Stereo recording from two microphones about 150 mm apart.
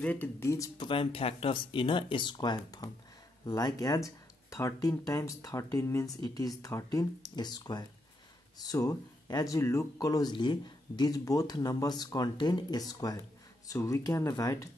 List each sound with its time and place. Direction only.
0.0 s speech: 10° left (ahead or behind)
0.8 s speech: 35° left (ahead or behind)